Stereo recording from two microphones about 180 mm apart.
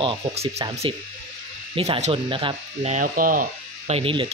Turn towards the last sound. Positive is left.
turn(degrees=-30)  # may be behind; listen again after turning